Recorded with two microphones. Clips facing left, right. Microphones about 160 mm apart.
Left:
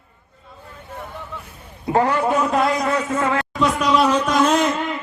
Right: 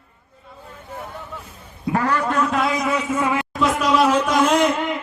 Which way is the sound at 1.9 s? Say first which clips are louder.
Left 3 dB; 20° left (ahead or behind).